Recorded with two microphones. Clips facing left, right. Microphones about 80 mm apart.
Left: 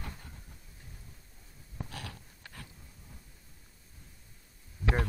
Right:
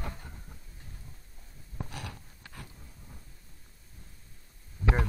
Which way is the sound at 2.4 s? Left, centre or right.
Centre.